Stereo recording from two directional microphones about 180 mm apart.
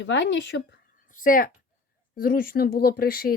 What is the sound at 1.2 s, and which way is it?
Speech, 50° left (ahead or behind).